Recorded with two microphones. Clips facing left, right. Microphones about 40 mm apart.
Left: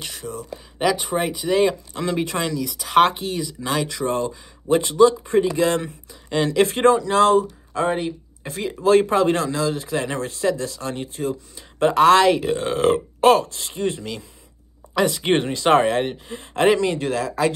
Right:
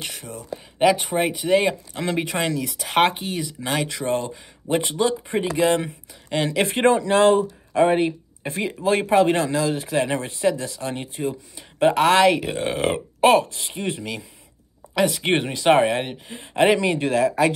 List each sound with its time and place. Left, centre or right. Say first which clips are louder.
0.0 s speech: left 2 dB; centre
3.9 s speech: left 1 dB; right
6.8 s speech: right 1 dB; right
8.8 s speech: left 2 dB; centre
15.0 s speech: left 1 dB; centre